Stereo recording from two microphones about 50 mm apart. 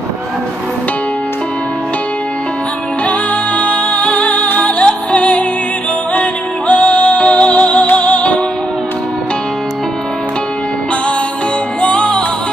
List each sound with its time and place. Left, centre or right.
3.1 s music: left
6.7 s music: left
11.8 s music: centre